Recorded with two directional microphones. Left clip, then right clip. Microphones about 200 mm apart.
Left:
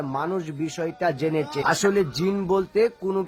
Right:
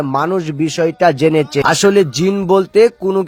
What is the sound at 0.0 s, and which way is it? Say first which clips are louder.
Speech: right 11 dB; 40° right (ahead or behind).